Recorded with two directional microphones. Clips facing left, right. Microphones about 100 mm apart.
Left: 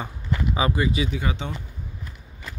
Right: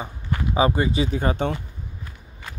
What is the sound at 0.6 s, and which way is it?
Speech, 30° right (ahead or behind).